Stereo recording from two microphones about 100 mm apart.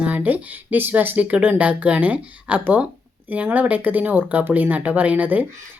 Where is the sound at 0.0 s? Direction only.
15° right (ahead or behind).